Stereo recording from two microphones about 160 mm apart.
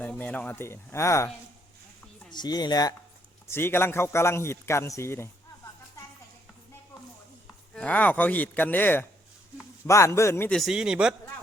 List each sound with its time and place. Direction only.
0.0 s a man's voice: 10° left (ahead or behind)
2.3 s speech: 25° left (ahead or behind)
3.4 s a man's voice: 15° left (ahead or behind)
7.4 s a man's voice: 5° left (ahead or behind)
10.6 s a man's voice: 5° right (ahead or behind)